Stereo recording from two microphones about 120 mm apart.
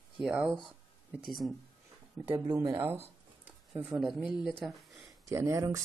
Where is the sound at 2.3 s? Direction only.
20° right (ahead or behind).